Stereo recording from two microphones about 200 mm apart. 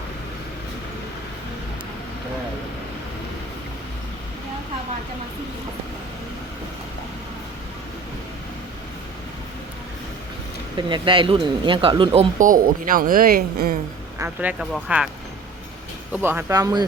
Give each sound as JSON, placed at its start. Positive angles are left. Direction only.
{"t": 10.8, "sound": "speech", "side_deg": -25}
{"t": 12.4, "sound": "speech", "side_deg": -45}
{"t": 14.2, "sound": "speech", "side_deg": -5}
{"t": 16.1, "sound": "speech", "side_deg": -10}